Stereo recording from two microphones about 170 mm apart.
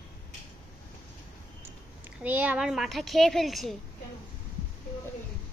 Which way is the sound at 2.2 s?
10° right (ahead or behind).